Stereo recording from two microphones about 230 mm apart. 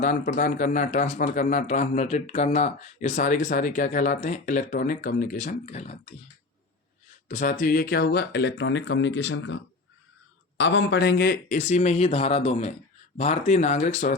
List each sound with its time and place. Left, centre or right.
0.0 s speech: left
7.3 s speech: left
10.6 s speech: left